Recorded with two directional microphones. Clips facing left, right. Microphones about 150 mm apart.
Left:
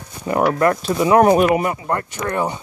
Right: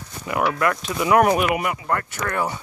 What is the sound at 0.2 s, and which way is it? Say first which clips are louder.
Speech: left 5 dB; 35° left (ahead or behind).